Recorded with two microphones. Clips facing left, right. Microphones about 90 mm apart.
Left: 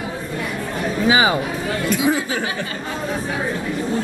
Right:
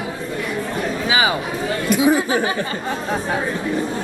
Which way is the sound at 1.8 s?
20° right (ahead or behind).